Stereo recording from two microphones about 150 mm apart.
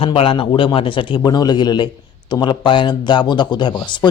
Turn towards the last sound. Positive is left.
turn(degrees=30)  # may be behind; listen again after turning